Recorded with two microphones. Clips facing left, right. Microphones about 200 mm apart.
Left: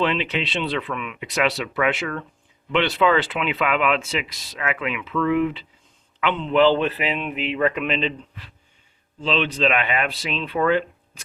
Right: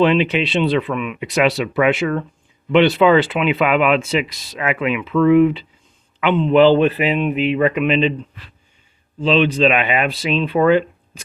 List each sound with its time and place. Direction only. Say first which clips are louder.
0.0 s speech: right 8 dB; 15° right (ahead or behind)
9.2 s speech: right 7 dB; 15° right (ahead or behind)